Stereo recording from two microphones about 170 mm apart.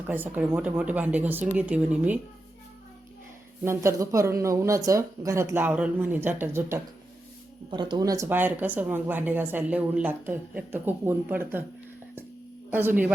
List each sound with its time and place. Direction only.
0.1 s speech: 10° right (ahead or behind)
3.6 s speech: 15° right (ahead or behind)
7.7 s speech: 25° right (ahead or behind); by 11.6 s 10° right (ahead or behind)
12.7 s speech: 10° right (ahead or behind)